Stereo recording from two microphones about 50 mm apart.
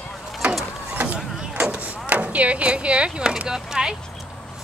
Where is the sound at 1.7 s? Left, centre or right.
Right; by 3.9 s centre.